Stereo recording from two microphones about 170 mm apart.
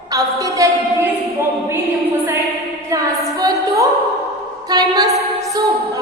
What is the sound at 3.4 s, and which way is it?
Music, 20° right (ahead or behind).